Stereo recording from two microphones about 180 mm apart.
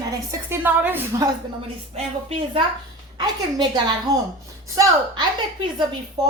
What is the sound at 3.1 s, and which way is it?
Speech, 25° right (ahead or behind).